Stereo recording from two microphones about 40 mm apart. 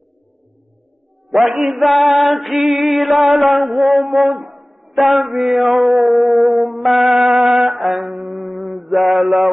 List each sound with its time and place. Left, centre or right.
1.3 s mantra: centre
4.5 s music: centre
8.1 s a sound: centre
8.4 s mantra: centre